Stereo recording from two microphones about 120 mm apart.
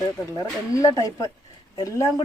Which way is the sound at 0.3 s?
30° left (ahead or behind).